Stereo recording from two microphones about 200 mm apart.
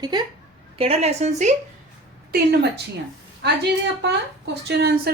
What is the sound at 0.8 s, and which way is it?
Speech, 30° right (ahead or behind).